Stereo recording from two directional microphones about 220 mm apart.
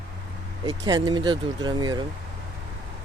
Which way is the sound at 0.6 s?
20° right (ahead or behind).